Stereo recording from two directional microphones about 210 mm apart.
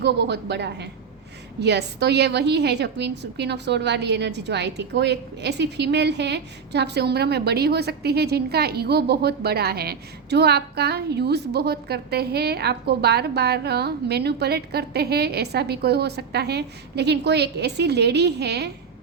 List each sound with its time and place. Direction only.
0.0 s a woman's voice: 55° right (ahead or behind)